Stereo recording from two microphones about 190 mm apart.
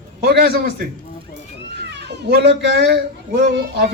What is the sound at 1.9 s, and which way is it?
A child's voice, 60° right (ahead or behind).